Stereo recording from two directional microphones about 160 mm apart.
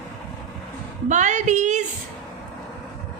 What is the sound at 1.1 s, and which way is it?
Speech, 50° right (ahead or behind).